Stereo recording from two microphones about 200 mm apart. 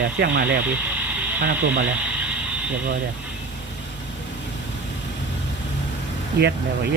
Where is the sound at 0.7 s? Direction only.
10° right (ahead or behind).